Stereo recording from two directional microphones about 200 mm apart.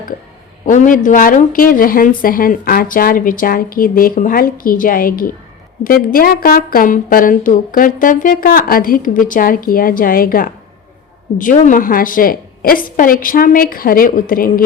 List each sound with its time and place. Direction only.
0.6 s speech: 40° left (ahead or behind)